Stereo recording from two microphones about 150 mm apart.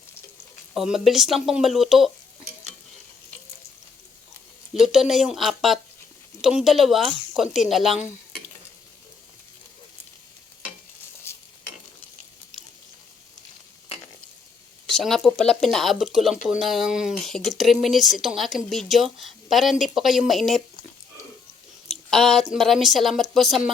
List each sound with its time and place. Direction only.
0.7 s speech: 5° right (ahead or behind)
4.7 s speech: centre (ahead or behind)
11.3 s stir: 15° left (ahead or behind)
14.8 s speech: centre (ahead or behind)
21.8 s a sound: centre (ahead or behind)
22.5 s speech: centre (ahead or behind)